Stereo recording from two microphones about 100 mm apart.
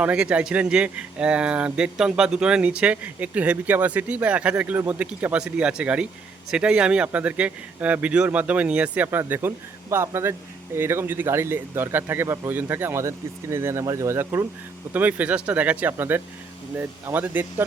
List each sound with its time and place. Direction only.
0.0 s speech: 10° right (ahead or behind)